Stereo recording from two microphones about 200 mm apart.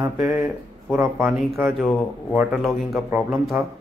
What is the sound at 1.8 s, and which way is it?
Speech, 5° left (ahead or behind).